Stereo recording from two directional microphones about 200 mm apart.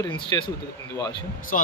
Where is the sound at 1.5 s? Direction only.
40° left (ahead or behind).